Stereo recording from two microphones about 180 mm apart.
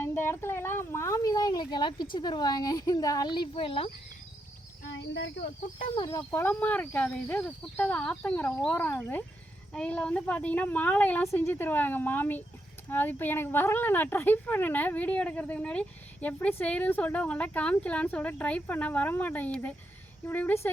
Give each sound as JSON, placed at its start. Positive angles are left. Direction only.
{"t": 0.0, "sound": "speech", "side_deg": 10}
{"t": 4.9, "sound": "speech", "side_deg": 70}
{"t": 5.8, "sound": "speech", "side_deg": 25}